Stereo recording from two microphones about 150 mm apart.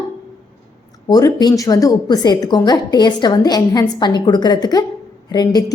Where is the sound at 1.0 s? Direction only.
25° left (ahead or behind).